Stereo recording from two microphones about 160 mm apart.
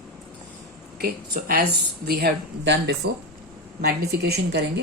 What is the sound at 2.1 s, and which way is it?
Speech, 85° right.